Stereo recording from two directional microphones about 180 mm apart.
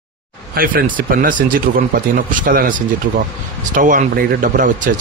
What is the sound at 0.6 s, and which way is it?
Speech, 50° right (ahead or behind).